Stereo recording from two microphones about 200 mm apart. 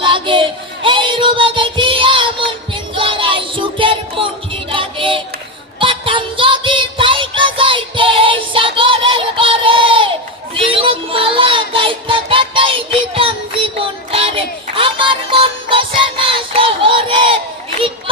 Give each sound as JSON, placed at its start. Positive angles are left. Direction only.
{"t": 0.0, "sound": "child singing", "side_deg": -25}
{"t": 2.7, "sound": "music", "side_deg": -25}
{"t": 10.5, "sound": "child singing", "side_deg": -25}
{"t": 13.7, "sound": "music", "side_deg": -25}